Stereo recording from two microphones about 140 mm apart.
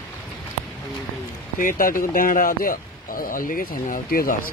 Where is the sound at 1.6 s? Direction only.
80° left.